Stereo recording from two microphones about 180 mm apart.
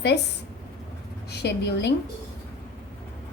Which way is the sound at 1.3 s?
70° left (ahead or behind).